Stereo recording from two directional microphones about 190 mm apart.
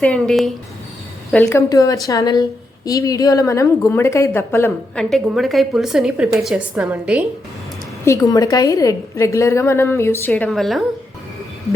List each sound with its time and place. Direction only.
0.0 s a woman's voice: 5° left (ahead or behind)
1.5 s a woman's voice: 15° left (ahead or behind)
5.0 s a woman's voice: centre (ahead or behind)
8.0 s a woman's voice: 15° left (ahead or behind); by 10.8 s centre (ahead or behind)